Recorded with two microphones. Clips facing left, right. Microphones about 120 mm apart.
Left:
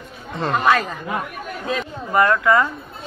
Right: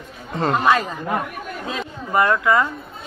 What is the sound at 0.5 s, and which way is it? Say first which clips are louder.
Speech: even; 15° right (ahead or behind).